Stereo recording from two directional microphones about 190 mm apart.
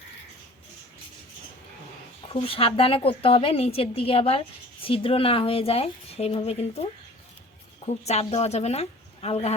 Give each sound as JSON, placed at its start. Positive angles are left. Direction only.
{"t": 2.3, "sound": "a woman's voice", "side_deg": 30}
{"t": 7.9, "sound": "speech", "side_deg": 35}